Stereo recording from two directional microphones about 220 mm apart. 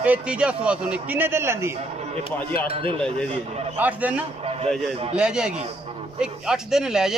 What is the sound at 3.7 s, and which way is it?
A man's voice, 5° right (ahead or behind).